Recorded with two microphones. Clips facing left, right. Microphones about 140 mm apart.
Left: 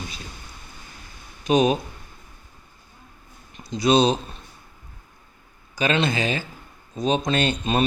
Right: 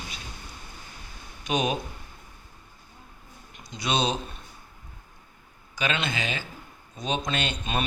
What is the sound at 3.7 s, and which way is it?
Speech, 35° left (ahead or behind).